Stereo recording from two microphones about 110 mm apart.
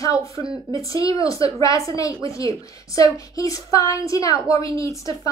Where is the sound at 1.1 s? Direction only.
30° left (ahead or behind).